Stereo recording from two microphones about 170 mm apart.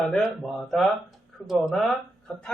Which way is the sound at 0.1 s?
Centre (ahead or behind).